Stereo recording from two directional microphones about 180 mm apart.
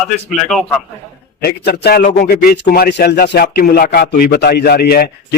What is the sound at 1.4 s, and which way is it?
Speech, 60° left (ahead or behind).